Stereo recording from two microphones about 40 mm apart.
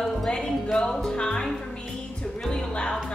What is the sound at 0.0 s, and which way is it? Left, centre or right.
Music, centre.